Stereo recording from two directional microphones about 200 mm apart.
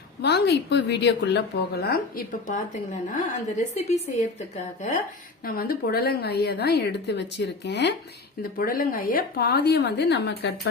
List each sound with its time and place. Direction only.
0.2 s a woman's voice: 55° left (ahead or behind)
3.8 s a woman's voice: 35° left (ahead or behind)
5.5 s a woman's voice: 50° left (ahead or behind)
8.5 s a woman's voice: 45° left (ahead or behind)